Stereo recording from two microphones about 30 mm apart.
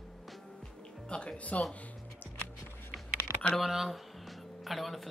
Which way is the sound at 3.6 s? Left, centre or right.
Centre.